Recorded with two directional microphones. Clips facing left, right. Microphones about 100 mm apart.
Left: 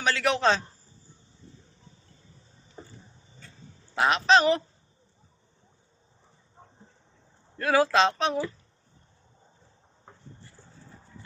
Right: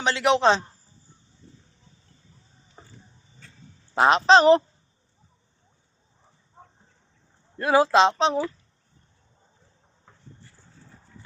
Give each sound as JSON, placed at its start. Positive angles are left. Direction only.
{"t": 0.0, "sound": "speech", "side_deg": -20}
{"t": 3.9, "sound": "speech", "side_deg": -30}
{"t": 7.6, "sound": "speech", "side_deg": -20}